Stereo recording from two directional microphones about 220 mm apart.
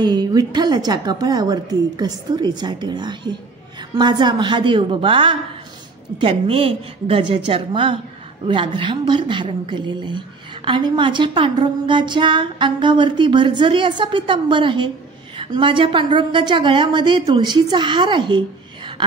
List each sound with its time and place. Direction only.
0.0 s a woman's voice: 20° right (ahead or behind)